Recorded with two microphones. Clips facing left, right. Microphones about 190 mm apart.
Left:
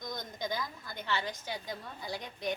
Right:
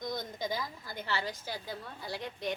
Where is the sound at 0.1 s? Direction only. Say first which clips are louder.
Even; 5° right (ahead or behind).